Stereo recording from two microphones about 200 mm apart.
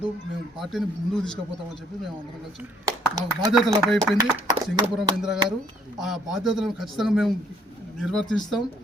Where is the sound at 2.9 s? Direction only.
15° right (ahead or behind).